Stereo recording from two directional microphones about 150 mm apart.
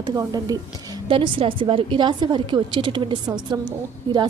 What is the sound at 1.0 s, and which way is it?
A woman's voice, 35° right (ahead or behind).